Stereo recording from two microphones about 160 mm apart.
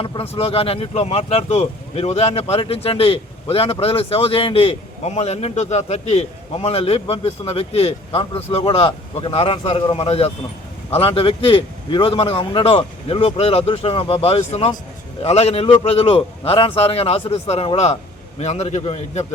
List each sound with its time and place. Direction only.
0.0 s a man's voice: 35° left (ahead or behind)